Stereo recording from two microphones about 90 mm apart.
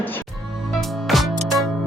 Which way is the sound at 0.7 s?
Centre (ahead or behind).